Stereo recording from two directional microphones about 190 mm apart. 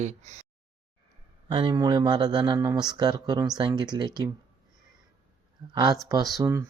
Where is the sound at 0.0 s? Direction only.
35° right (ahead or behind).